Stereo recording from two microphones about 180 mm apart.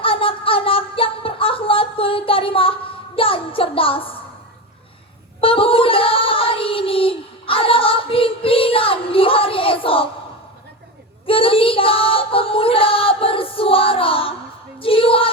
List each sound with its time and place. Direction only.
0.0 s a sound: 30° left (ahead or behind)
5.4 s female singing: 30° left (ahead or behind)
11.3 s female singing: 30° left (ahead or behind)
14.8 s music: 30° left (ahead or behind)